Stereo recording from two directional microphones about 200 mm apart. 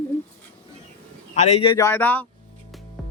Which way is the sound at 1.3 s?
25° left (ahead or behind).